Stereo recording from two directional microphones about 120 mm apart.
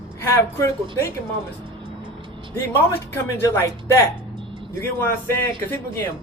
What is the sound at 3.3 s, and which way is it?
Speech, 20° left (ahead or behind).